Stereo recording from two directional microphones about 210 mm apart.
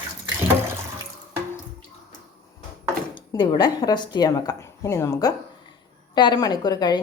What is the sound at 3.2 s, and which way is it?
A woman's voice, 20° left (ahead or behind).